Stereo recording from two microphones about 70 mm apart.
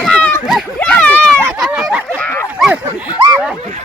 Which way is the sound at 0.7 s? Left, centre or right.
Left.